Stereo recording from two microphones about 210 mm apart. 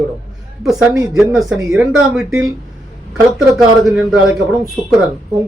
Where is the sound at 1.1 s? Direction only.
5° right (ahead or behind).